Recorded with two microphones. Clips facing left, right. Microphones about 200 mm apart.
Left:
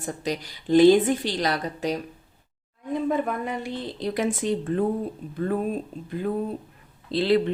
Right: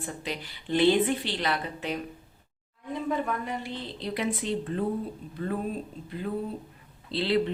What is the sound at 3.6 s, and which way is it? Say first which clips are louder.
A woman's voice: left 5 dB; 45° left (ahead or behind).